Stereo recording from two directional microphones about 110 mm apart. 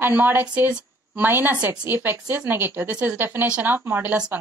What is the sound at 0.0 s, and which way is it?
Speech, 20° right (ahead or behind).